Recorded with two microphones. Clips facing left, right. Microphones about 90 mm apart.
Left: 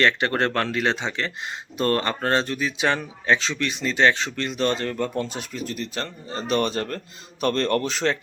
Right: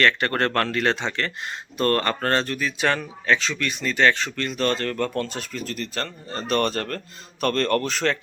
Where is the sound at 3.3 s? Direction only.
30° left (ahead or behind).